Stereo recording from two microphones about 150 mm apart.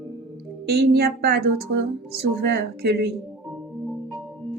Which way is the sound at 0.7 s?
90° right.